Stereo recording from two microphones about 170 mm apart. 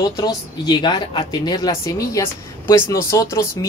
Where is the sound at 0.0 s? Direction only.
25° left (ahead or behind).